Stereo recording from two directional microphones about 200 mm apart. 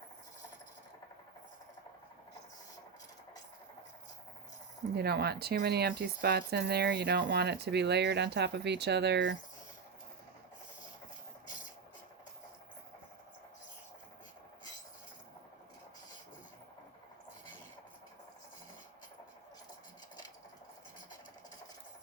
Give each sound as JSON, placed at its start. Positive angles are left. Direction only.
{"t": 4.9, "sound": "speech", "side_deg": -55}